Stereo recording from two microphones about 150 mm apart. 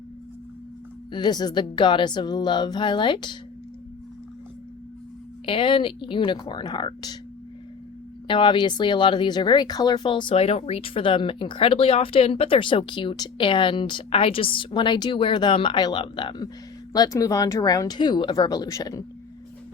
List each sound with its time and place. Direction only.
1.1 s speech: 30° left (ahead or behind)
5.5 s speech: 35° left (ahead or behind)
8.3 s speech: 30° left (ahead or behind)